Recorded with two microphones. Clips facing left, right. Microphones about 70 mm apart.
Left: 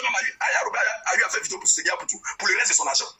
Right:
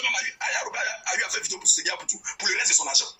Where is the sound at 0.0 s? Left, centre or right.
Left.